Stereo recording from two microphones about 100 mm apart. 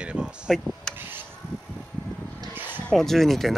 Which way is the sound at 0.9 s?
20° right (ahead or behind).